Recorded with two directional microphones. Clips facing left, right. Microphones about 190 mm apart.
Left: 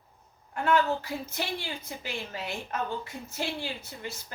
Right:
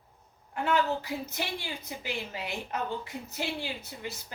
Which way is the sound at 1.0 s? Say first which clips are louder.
Left 1 dB; 15° right (ahead or behind).